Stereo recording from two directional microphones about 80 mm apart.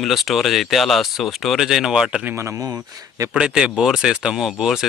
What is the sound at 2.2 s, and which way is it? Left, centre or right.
Speech, right.